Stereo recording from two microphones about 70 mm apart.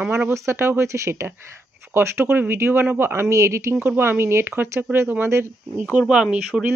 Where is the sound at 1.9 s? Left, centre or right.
Right.